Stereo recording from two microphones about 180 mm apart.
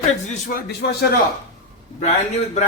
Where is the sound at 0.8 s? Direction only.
65° left (ahead or behind).